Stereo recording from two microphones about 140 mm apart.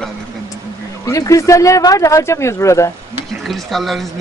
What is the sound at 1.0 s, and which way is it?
Speech, 25° left (ahead or behind).